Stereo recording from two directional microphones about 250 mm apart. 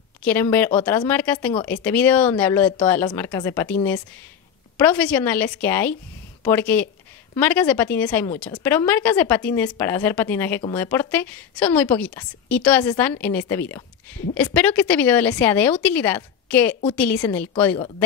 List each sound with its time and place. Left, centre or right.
0.2 s a woman's voice: centre
4.7 s a woman's voice: centre
17.7 s speech: centre